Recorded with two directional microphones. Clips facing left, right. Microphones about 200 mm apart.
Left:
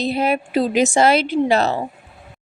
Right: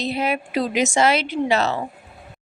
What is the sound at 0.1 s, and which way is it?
A woman's voice, 35° left (ahead or behind).